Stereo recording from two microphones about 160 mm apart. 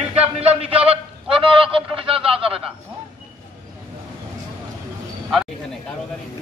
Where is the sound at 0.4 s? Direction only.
40° right (ahead or behind).